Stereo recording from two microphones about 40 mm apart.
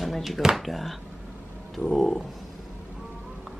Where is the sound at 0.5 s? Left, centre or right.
Centre.